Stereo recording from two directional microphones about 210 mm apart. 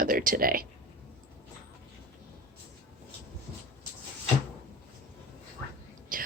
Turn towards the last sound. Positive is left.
turn(degrees=-40)  # may be behind; listen again after turning